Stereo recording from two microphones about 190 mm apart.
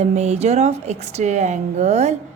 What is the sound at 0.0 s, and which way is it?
A woman's voice, 35° right (ahead or behind).